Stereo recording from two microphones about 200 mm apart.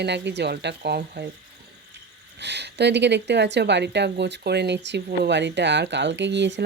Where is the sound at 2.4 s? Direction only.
60° right (ahead or behind).